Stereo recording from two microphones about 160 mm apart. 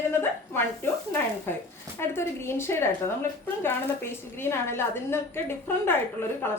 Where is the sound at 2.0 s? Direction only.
15° left (ahead or behind).